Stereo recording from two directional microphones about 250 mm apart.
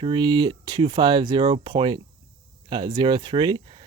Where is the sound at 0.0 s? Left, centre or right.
Centre.